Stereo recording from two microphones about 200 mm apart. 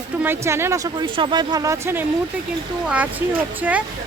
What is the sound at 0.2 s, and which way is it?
Speech, 10° right (ahead or behind).